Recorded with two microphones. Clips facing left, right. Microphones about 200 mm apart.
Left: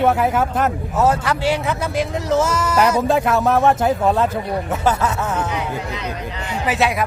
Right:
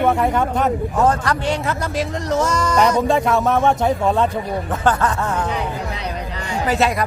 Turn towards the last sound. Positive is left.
turn(degrees=0)  # may be behind; listen again after turning